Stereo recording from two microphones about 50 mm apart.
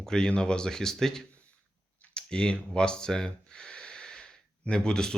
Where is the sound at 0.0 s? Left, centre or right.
Centre.